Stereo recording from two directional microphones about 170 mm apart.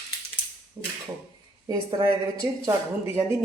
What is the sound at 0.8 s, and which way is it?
A woman's voice, 15° right (ahead or behind).